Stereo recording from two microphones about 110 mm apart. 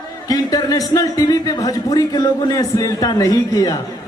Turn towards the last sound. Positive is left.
turn(degrees=35)  # may be behind; listen again after turning